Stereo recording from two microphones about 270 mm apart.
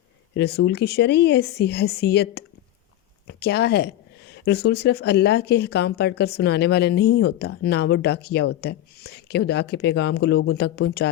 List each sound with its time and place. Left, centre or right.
0.3 s speech: left